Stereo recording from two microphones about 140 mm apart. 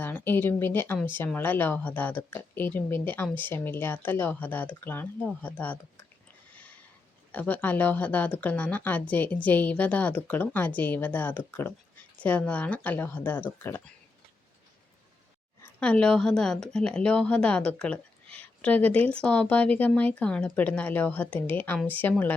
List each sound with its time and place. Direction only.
0.0 s speech: 15° left (ahead or behind)
6.5 s a sound: 10° left (ahead or behind)
7.3 s speech: 10° left (ahead or behind)
15.8 s speech: 5° left (ahead or behind)